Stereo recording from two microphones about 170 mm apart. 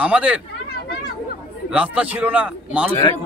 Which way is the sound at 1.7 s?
5° right (ahead or behind).